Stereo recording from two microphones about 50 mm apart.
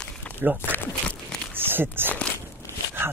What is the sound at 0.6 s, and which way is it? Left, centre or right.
Speech, left.